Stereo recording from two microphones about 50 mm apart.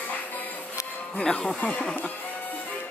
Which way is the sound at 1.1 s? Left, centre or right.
Centre.